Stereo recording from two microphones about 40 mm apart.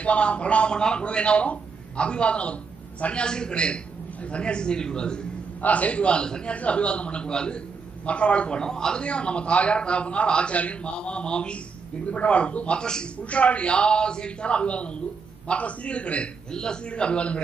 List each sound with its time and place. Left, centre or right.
0.0 s a man's voice: left
5.6 s a man's voice: left
6.5 s a man's voice: left
12.8 s a man's voice: centre
13.2 s a man's voice: left